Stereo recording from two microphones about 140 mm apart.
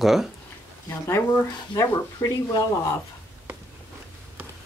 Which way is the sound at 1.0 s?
20° left (ahead or behind).